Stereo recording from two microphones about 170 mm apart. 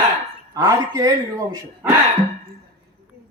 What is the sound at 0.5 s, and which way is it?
Speech, 20° right (ahead or behind).